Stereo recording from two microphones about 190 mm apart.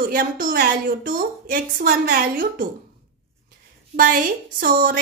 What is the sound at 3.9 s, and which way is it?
A woman's voice, 45° right (ahead or behind).